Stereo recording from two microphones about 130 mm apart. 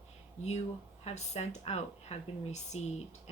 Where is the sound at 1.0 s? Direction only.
60° left (ahead or behind).